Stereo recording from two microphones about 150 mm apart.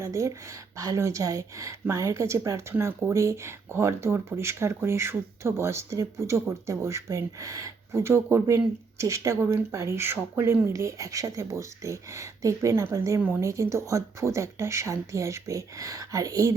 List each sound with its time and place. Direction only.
0.0 s a woman's voice: 20° right (ahead or behind)